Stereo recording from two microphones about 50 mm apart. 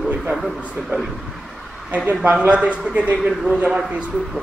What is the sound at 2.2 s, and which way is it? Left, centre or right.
Speech, right.